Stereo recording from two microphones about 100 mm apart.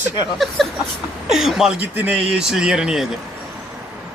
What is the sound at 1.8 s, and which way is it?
Speech, 15° right (ahead or behind).